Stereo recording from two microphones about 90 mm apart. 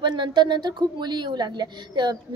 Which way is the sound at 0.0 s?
60° right (ahead or behind).